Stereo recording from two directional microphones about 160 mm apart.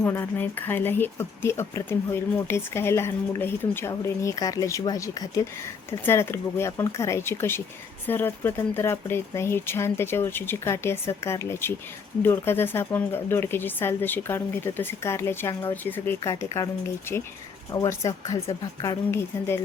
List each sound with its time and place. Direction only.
0.0 s speech: 15° left (ahead or behind)
17.7 s speech: 20° left (ahead or behind)